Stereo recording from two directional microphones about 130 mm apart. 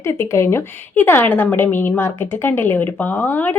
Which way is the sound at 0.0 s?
20° left (ahead or behind).